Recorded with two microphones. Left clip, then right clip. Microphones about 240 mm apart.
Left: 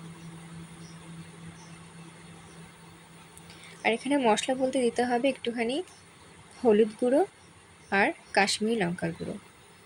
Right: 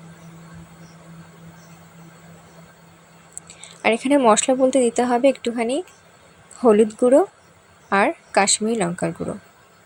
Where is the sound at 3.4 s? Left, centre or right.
Right.